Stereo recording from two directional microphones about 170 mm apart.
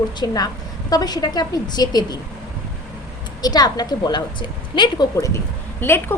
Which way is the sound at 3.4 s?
25° left (ahead or behind).